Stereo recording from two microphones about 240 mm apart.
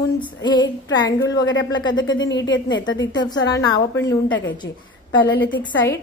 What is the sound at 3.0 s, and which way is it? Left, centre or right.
A woman's voice, centre.